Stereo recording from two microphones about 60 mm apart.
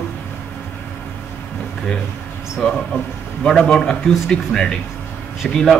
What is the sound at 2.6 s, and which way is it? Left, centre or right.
A man's voice, centre.